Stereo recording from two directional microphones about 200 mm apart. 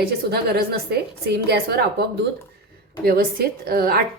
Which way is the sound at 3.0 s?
50° right (ahead or behind).